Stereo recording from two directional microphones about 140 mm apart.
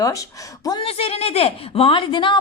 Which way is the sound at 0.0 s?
25° left (ahead or behind).